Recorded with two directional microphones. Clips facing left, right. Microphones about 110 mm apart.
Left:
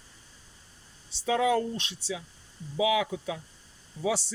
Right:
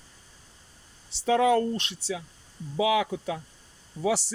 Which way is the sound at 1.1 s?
60° right (ahead or behind).